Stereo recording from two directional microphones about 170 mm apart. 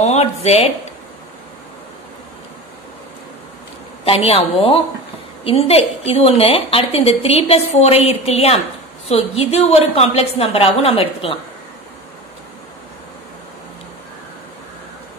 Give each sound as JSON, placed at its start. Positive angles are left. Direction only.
{"t": 0.0, "sound": "speech", "side_deg": 40}
{"t": 4.0, "sound": "a woman's voice", "side_deg": 35}